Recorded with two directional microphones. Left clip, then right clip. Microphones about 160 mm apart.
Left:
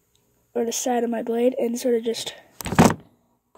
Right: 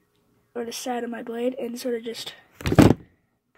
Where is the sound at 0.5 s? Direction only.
50° left (ahead or behind).